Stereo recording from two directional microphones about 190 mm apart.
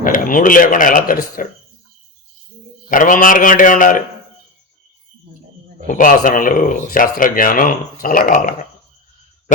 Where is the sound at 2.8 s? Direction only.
45° left (ahead or behind).